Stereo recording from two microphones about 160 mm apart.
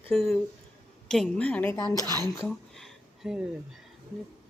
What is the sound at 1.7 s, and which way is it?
Speech, 20° left (ahead or behind).